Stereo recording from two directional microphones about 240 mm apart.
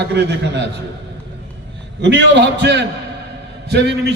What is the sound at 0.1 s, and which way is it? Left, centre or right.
Speech, right.